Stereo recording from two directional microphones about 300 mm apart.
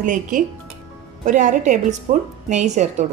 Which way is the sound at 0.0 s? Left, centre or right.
Right.